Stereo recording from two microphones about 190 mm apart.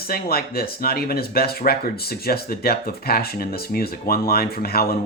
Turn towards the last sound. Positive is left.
turn(degrees=55)  # may be behind; listen again after turning